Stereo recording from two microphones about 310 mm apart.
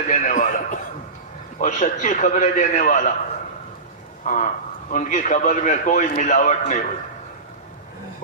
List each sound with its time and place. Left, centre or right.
0.1 s a sound: left
1.5 s a man's voice: left
4.3 s a man's voice: left